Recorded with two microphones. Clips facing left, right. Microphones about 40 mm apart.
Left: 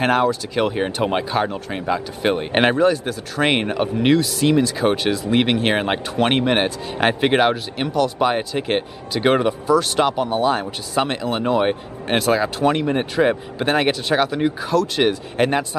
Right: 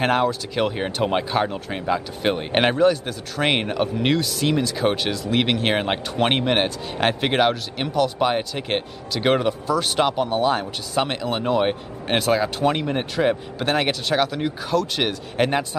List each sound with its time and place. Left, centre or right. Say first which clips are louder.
0.0 s speech: left 2 dB; centre